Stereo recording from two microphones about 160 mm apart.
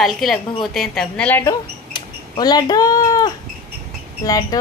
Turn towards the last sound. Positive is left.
turn(degrees=20)  # may be behind; listen again after turning